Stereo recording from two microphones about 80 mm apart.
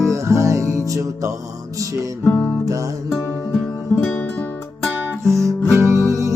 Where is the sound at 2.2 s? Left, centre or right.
Left.